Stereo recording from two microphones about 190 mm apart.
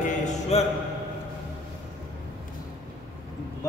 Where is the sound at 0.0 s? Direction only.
40° left (ahead or behind).